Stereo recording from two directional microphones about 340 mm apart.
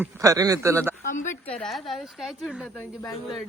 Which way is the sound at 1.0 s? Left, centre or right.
Left.